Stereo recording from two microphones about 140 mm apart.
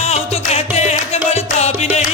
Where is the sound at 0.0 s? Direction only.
50° left (ahead or behind).